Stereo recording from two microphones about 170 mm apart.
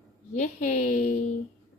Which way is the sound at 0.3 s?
45° left (ahead or behind).